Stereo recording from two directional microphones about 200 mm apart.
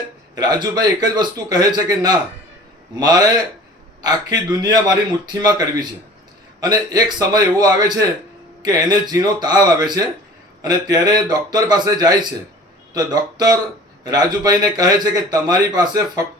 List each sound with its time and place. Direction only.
0.3 s a man's voice: 20° right (ahead or behind)